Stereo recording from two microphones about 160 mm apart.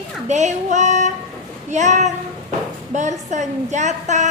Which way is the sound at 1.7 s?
45° right (ahead or behind).